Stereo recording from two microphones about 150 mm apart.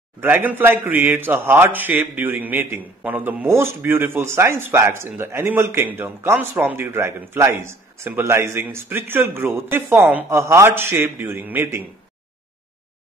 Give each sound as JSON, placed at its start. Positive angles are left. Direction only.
{"t": 0.2, "sound": "a man's voice", "side_deg": -15}